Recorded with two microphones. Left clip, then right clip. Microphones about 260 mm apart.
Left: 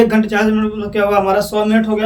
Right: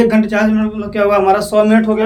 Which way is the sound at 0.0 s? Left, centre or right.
Centre.